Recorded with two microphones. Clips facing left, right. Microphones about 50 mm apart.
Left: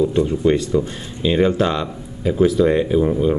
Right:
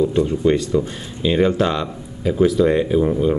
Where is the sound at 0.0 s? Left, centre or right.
Centre.